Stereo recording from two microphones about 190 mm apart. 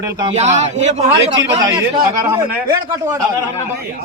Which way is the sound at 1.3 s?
20° right (ahead or behind).